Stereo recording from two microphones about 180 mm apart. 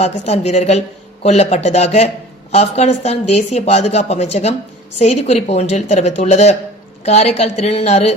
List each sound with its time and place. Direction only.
0.0 s speech: 35° left (ahead or behind)